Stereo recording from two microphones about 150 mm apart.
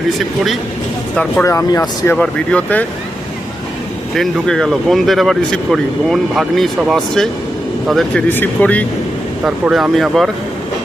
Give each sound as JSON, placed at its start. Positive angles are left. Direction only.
{"t": 0.2, "sound": "speech", "side_deg": 0}
{"t": 1.5, "sound": "speech", "side_deg": 20}
{"t": 2.1, "sound": "speech", "side_deg": 5}
{"t": 4.1, "sound": "speech", "side_deg": 0}
{"t": 8.3, "sound": "speech", "side_deg": 10}
{"t": 9.4, "sound": "speech", "side_deg": -5}